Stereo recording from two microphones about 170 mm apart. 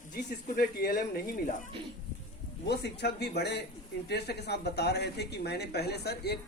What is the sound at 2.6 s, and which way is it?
Speech, 75° left (ahead or behind).